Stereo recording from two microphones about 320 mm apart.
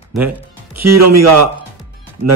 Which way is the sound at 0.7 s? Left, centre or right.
Right.